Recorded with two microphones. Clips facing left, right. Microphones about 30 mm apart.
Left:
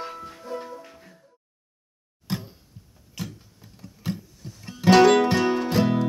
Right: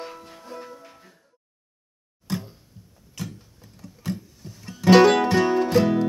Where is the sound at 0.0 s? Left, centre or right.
Centre.